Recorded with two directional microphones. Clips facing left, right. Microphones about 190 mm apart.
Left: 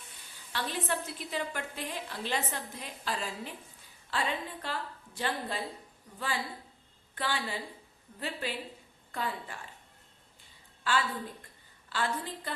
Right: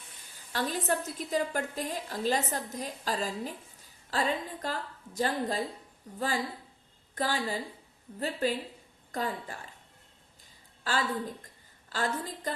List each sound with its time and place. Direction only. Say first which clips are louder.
0.5 s a woman's voice: right 4 dB; 45° right (ahead or behind)
11.9 s a woman's voice: right 1 dB; 40° right (ahead or behind)